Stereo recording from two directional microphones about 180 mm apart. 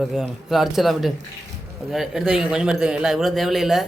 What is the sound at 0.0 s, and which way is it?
A man's voice, centre (ahead or behind).